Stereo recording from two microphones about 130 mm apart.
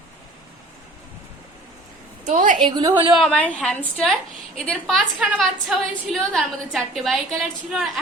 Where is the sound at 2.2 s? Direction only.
80° right.